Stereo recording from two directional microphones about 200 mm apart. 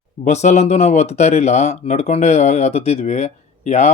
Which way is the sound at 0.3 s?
35° left (ahead or behind).